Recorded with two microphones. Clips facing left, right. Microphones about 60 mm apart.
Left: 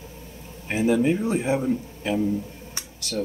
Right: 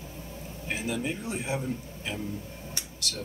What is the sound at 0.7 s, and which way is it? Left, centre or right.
Speech, left.